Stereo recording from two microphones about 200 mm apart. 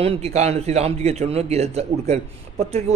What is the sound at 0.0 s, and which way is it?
A man's voice, 30° right (ahead or behind).